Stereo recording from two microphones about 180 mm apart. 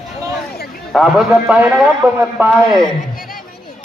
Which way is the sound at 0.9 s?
Centre (ahead or behind).